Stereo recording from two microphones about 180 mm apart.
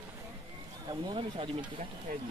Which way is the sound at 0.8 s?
25° right (ahead or behind).